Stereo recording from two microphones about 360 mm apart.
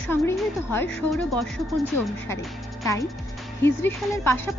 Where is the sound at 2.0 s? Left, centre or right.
Left.